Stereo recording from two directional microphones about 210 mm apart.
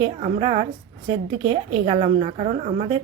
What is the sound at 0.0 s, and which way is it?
A woman's voice, 25° right (ahead or behind).